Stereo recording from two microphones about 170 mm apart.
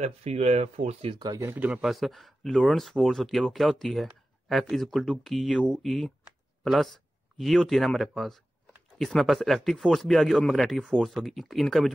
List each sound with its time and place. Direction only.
0.0 s speech: 40° right (ahead or behind)
1.2 s speech: 15° right (ahead or behind); by 11.9 s centre (ahead or behind)